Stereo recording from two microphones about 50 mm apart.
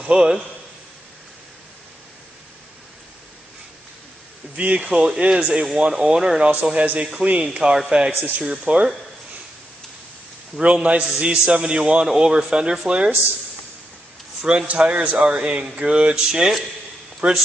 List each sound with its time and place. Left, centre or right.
0.0 s a man's voice: centre
4.6 s a man's voice: right
8.1 s speech: right
8.4 s a man's voice: right
10.6 s a man's voice: right
14.5 s a man's voice: centre
17.2 s a man's voice: right